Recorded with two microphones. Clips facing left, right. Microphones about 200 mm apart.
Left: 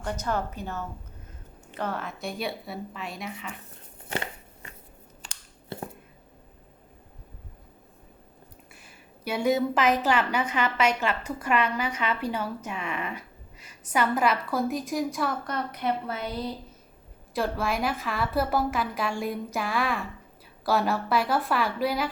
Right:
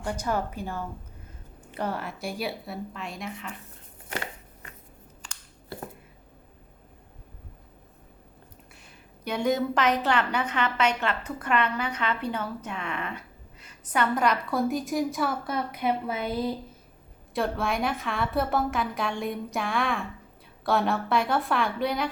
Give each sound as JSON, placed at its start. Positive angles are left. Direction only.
{"t": 0.0, "sound": "a woman's voice", "side_deg": -10}
{"t": 5.7, "sound": "a sound", "side_deg": 25}
{"t": 8.7, "sound": "a woman's voice", "side_deg": 5}
{"t": 17.3, "sound": "a woman's voice", "side_deg": 0}